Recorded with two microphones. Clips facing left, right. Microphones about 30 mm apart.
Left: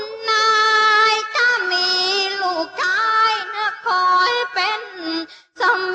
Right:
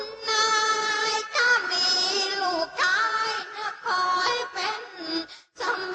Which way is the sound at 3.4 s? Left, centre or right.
Left.